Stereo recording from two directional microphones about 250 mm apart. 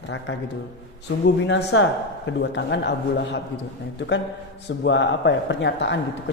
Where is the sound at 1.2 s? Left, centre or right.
Left.